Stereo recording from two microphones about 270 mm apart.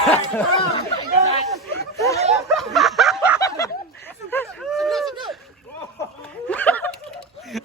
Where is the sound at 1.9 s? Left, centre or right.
Centre.